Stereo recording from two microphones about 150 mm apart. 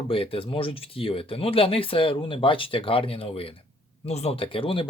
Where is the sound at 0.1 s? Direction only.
35° left (ahead or behind).